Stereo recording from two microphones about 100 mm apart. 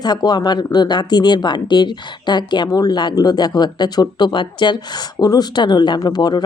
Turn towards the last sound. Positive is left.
turn(degrees=45)  # may be behind; listen again after turning